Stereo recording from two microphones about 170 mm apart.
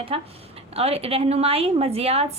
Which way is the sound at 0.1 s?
35° right (ahead or behind).